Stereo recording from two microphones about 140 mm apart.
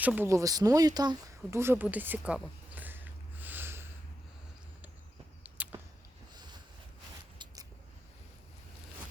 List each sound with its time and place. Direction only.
0.0 s speech: 10° right (ahead or behind)
0.3 s speech: 25° right (ahead or behind)
5.4 s walk: 10° right (ahead or behind)
7.3 s a sound: 25° right (ahead or behind)